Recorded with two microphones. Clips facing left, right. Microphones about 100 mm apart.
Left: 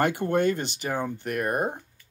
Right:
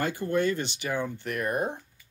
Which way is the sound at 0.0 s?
60° left (ahead or behind).